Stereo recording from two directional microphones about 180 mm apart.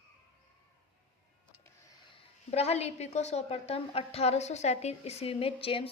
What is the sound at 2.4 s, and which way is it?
A woman's voice, 35° left (ahead or behind).